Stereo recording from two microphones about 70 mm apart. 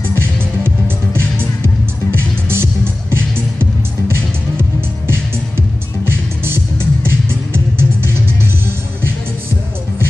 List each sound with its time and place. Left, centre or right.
0.1 s music: right